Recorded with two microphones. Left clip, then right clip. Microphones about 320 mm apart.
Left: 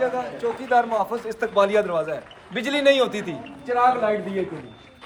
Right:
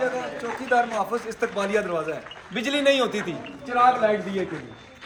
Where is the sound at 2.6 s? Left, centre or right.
Left.